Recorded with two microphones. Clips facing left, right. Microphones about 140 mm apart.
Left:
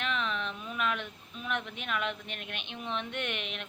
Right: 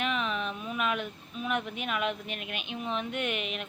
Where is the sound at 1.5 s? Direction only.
10° right (ahead or behind).